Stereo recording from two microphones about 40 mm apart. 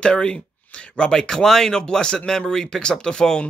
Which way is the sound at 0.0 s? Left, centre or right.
Left.